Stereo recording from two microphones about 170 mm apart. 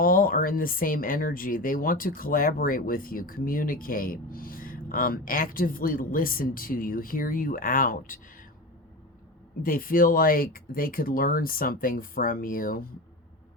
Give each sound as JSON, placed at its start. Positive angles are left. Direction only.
{"t": 0.0, "sound": "speech", "side_deg": 55}
{"t": 9.6, "sound": "speech", "side_deg": 55}